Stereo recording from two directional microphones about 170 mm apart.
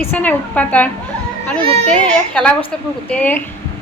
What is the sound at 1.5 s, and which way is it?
Speech, 35° right (ahead or behind).